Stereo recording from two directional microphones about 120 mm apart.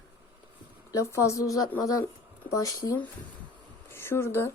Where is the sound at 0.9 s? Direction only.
25° left (ahead or behind).